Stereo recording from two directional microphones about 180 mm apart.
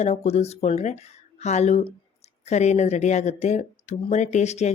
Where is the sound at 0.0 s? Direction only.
40° left (ahead or behind).